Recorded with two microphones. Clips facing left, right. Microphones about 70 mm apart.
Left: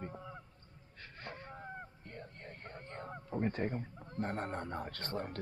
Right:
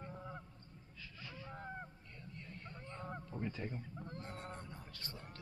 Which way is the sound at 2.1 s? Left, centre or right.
Left.